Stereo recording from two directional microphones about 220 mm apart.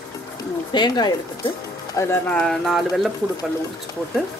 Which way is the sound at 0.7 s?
20° left (ahead or behind).